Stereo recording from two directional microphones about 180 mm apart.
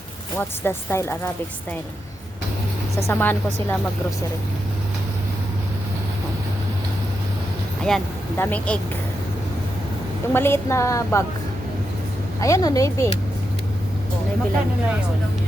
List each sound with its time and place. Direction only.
0.3 s speech: 10° left (ahead or behind)
3.1 s speech: 10° left (ahead or behind)
7.8 s speech: 5° left (ahead or behind)
10.3 s speech: 15° left (ahead or behind)
12.4 s speech: 20° left (ahead or behind)